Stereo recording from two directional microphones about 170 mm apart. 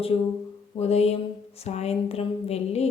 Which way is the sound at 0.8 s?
40° left (ahead or behind).